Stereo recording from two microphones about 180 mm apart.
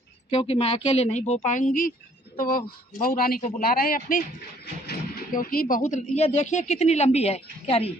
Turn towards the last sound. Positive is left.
turn(degrees=35)  # may be behind; listen again after turning